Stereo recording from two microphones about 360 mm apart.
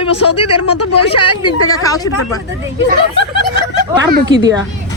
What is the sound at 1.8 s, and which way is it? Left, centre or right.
Speech, centre.